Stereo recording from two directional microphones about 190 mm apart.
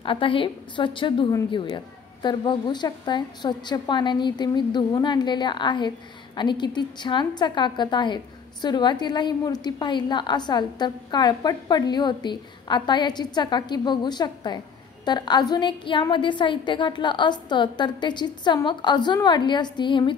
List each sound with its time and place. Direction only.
0.0 s a woman's voice: 25° left (ahead or behind)